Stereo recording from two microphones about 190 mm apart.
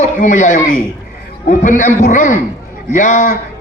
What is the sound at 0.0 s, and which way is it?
A man's voice, 40° left (ahead or behind).